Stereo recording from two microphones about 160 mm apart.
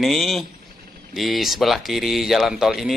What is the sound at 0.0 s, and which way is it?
Speech, centre (ahead or behind).